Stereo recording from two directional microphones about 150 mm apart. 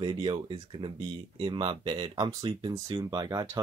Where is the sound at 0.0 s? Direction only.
35° right (ahead or behind).